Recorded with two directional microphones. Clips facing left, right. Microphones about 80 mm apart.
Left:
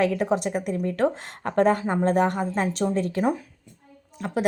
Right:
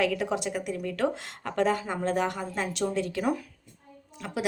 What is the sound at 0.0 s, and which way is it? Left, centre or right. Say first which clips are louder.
A woman's voice: left 5 dB; left.